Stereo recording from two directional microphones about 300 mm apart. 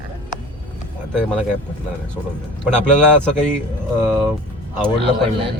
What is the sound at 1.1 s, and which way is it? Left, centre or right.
Speech, centre.